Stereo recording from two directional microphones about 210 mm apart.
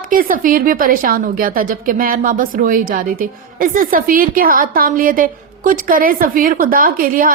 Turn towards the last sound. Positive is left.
turn(degrees=-40)  # may be behind; listen again after turning